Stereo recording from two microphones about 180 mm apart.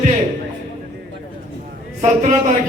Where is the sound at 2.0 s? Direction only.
45° right (ahead or behind).